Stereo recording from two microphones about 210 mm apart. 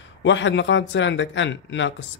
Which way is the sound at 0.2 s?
60° left (ahead or behind).